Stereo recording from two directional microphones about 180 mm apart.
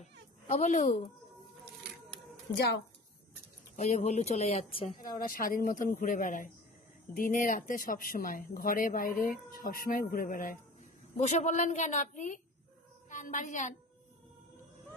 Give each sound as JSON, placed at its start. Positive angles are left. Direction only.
{"t": 0.0, "sound": "a sound", "side_deg": 40}
{"t": 2.5, "sound": "a woman's voice", "side_deg": 65}
{"t": 3.7, "sound": "a woman's voice", "side_deg": 40}
{"t": 5.2, "sound": "a woman's voice", "side_deg": 50}